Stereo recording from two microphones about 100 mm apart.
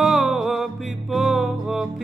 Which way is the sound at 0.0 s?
Centre (ahead or behind).